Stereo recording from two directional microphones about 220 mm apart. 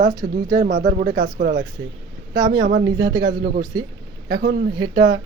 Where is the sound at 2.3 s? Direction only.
20° right (ahead or behind).